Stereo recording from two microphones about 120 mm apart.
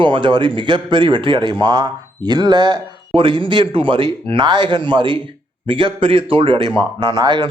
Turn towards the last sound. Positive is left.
turn(degrees=-40)  # may be behind; listen again after turning